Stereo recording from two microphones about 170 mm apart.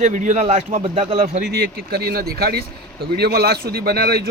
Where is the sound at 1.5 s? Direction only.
70° right (ahead or behind).